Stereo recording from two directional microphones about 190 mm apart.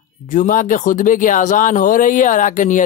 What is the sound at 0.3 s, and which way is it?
Speech, 45° left (ahead or behind).